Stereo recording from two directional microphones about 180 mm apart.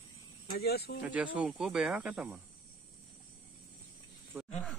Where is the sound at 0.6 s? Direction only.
60° left (ahead or behind).